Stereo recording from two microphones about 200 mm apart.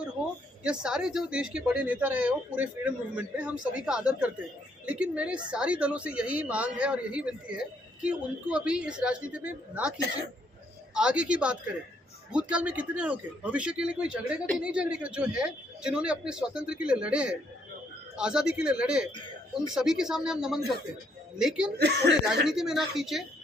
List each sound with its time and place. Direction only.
0.6 s a woman's voice: 5° right (ahead or behind)
10.9 s a woman's voice: 5° right (ahead or behind)
21.8 s speech: 55° right (ahead or behind)
22.4 s a woman's voice: centre (ahead or behind)